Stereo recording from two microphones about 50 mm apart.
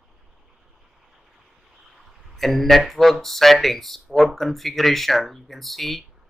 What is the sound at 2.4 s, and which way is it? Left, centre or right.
Speech, centre.